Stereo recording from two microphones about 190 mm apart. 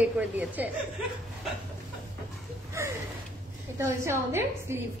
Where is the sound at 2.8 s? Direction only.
15° right (ahead or behind).